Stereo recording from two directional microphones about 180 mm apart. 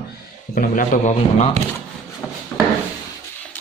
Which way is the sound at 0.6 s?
45° left (ahead or behind).